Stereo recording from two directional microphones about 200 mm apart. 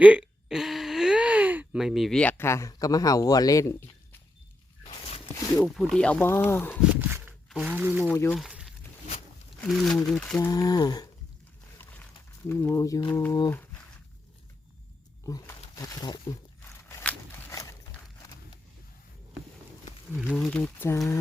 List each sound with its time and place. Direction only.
0.0 s speech: 5° right (ahead or behind); by 3.8 s 15° left (ahead or behind)
4.9 s zipper: 25° left (ahead or behind)
5.6 s speech: centre (ahead or behind)
6.9 s speech: 10° right (ahead or behind)
8.1 s speech: 10° left (ahead or behind)
8.4 s a sound: centre (ahead or behind)
9.6 s speech: centre (ahead or behind)
10.5 s speech: 20° left (ahead or behind)
12.5 s speech: 10° left (ahead or behind)
15.3 s speech: 15° left (ahead or behind)
16.9 s a sound: 10° left (ahead or behind)
20.1 s speech: centre (ahead or behind)